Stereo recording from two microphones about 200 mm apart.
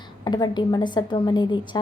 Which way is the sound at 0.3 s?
20° left (ahead or behind).